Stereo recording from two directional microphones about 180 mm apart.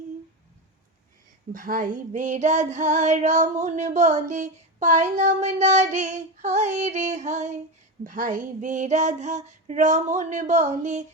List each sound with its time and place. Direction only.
1.5 s child singing: 50° right (ahead or behind)